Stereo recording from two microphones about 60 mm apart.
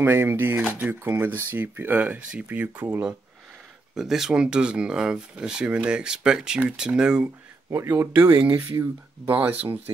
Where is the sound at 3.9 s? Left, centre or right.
Centre.